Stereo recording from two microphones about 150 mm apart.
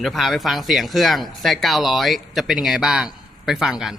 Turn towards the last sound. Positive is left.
turn(degrees=-5)  # may be behind; listen again after turning